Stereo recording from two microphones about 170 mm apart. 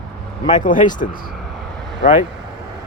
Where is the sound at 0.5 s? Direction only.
50° left (ahead or behind).